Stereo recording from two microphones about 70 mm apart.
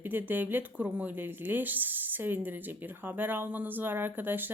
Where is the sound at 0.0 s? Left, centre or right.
Right.